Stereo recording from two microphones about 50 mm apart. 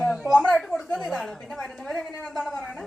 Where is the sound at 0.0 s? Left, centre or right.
Centre.